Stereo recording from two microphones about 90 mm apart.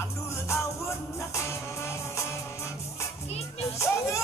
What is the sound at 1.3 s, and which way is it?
Music, 30° left (ahead or behind).